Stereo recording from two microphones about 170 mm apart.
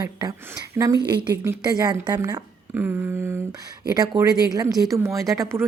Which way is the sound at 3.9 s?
20° right (ahead or behind).